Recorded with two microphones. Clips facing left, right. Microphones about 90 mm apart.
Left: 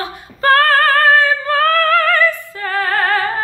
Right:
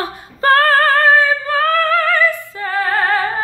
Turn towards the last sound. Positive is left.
turn(degrees=-15)  # may be behind; listen again after turning